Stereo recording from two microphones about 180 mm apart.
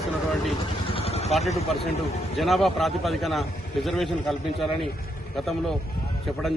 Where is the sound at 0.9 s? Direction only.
35° left (ahead or behind).